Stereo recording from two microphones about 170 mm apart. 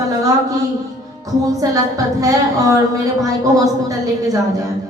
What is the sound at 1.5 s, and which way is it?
A woman's voice, 20° right (ahead or behind).